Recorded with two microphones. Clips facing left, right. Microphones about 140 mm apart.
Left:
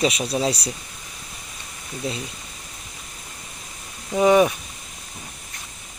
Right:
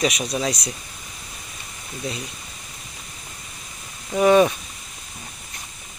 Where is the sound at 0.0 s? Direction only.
30° left (ahead or behind).